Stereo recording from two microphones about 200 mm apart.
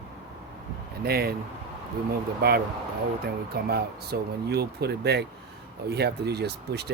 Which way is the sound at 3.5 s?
50° right (ahead or behind).